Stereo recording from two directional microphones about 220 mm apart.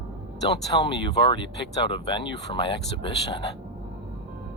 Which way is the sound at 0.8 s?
20° left (ahead or behind).